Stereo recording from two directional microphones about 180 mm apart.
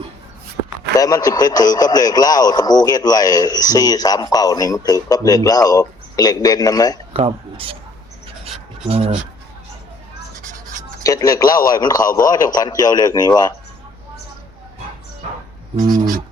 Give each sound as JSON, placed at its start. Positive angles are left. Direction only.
{"t": 0.9, "sound": "speech", "side_deg": 20}
{"t": 7.1, "sound": "speech", "side_deg": -30}
{"t": 8.9, "sound": "speech", "side_deg": -35}
{"t": 11.0, "sound": "speech", "side_deg": 20}
{"t": 16.0, "sound": "a sound", "side_deg": -50}